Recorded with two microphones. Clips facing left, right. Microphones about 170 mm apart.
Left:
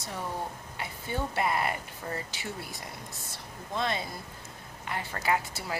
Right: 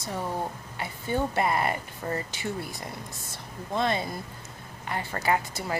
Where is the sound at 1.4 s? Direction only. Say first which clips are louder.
Even; 50° right (ahead or behind).